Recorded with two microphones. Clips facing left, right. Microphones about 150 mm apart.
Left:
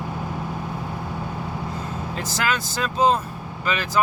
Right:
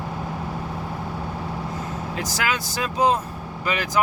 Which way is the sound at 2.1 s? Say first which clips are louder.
Left 1 dB; 10° right (ahead or behind).